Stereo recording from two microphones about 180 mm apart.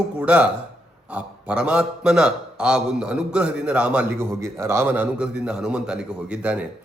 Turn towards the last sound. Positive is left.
turn(degrees=-10)  # may be behind; listen again after turning